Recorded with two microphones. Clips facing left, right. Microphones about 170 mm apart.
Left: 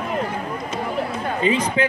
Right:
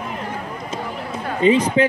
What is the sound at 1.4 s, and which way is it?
Speech, 30° right (ahead or behind).